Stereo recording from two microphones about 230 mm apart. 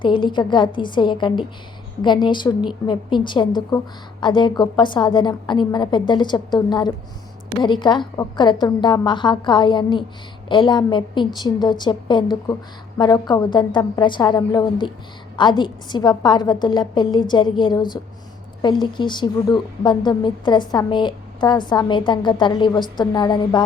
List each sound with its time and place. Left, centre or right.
0.0 s a woman's voice: left